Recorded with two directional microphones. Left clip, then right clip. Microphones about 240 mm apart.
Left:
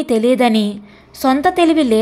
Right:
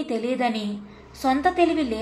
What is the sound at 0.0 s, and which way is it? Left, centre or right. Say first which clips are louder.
A woman's voice: left 11 dB; left.